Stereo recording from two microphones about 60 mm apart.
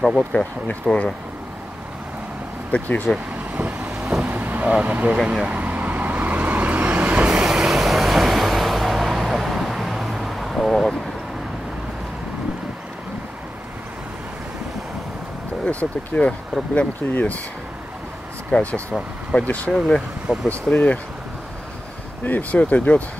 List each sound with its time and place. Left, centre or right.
0.0 s speech: centre
0.8 s speech: centre
2.7 s speech: left
3.5 s vehicle: right
4.0 s vehicle: centre
4.3 s vehicle: right
5.2 s speech: centre
5.5 s vehicle: right
7.4 s vehicle: centre
15.6 s speech: left
18.5 s speech: left
22.2 s speech: left